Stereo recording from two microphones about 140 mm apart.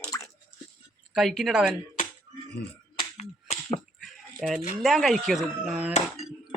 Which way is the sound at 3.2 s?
50° left (ahead or behind).